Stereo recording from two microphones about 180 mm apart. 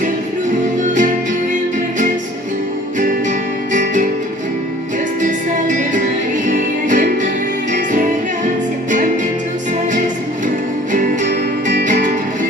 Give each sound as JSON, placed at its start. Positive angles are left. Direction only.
{"t": 3.7, "sound": "music", "side_deg": -45}
{"t": 5.2, "sound": "music", "side_deg": -45}
{"t": 10.9, "sound": "music", "side_deg": -45}
{"t": 11.9, "sound": "music", "side_deg": -45}